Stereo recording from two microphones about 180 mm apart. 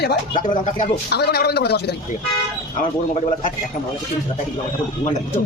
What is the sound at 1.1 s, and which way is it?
Speech, 65° left (ahead or behind).